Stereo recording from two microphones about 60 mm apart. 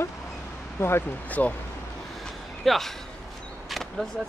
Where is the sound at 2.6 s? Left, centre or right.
Centre.